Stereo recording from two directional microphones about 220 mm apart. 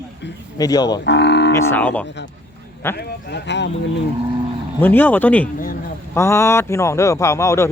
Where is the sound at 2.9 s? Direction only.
50° left (ahead or behind).